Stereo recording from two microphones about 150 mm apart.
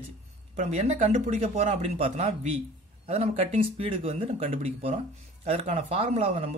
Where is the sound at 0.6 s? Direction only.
50° right (ahead or behind).